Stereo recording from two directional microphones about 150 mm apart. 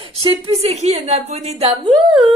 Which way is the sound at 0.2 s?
40° right (ahead or behind).